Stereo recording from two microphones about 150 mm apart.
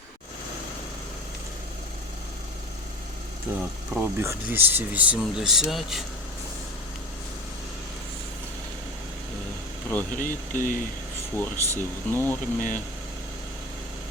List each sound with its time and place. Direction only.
3.5 s speech: 15° right (ahead or behind)
9.9 s speech: 15° left (ahead or behind)
10.2 s speech: 65° left (ahead or behind)
11.3 s speech: 15° left (ahead or behind)